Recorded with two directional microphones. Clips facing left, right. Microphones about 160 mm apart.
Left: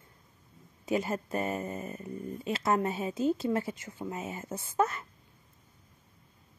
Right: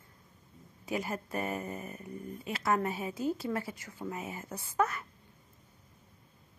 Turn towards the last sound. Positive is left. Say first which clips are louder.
# left 2 dB
turn(degrees=25)  # may be behind; listen again after turning